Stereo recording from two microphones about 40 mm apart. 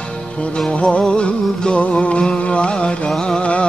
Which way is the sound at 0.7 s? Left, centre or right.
Left.